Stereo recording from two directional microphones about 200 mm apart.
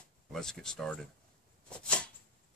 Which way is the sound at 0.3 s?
Centre (ahead or behind).